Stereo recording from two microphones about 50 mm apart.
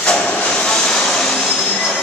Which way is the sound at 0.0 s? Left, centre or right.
Left.